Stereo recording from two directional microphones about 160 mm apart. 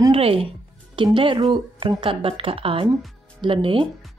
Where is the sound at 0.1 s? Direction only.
35° right (ahead or behind).